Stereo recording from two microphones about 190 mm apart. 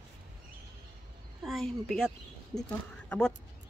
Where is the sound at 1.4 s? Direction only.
Centre (ahead or behind).